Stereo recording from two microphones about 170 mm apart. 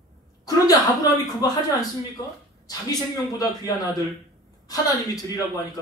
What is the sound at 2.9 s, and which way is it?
Speech, 20° left (ahead or behind).